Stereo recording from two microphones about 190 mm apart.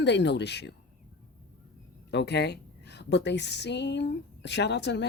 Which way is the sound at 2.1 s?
60° left (ahead or behind).